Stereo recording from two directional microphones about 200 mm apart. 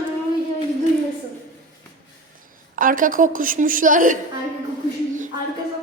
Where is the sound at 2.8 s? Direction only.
45° right (ahead or behind).